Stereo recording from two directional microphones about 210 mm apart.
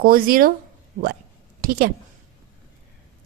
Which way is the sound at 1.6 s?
45° right (ahead or behind).